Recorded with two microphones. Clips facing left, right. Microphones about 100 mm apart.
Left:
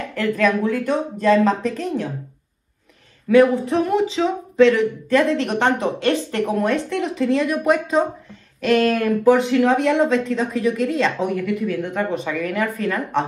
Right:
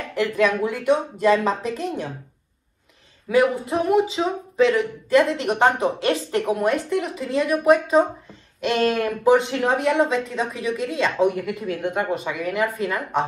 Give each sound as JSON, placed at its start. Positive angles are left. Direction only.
{"t": 0.1, "sound": "speech", "side_deg": -15}
{"t": 3.3, "sound": "speech", "side_deg": -10}
{"t": 8.5, "sound": "speech", "side_deg": -20}
{"t": 9.8, "sound": "speech", "side_deg": -5}
{"t": 11.3, "sound": "speech", "side_deg": -25}